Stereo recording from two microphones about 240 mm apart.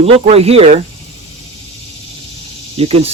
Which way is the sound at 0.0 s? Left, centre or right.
Right.